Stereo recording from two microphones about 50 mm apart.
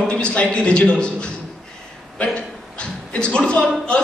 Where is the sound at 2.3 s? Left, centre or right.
Left.